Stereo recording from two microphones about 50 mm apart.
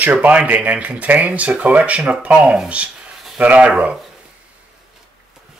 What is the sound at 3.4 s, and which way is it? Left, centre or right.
Speech, right.